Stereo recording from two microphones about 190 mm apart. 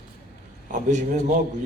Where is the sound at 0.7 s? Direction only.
40° right (ahead or behind).